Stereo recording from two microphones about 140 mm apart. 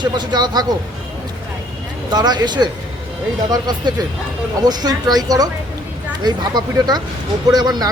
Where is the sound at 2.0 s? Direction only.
30° right (ahead or behind).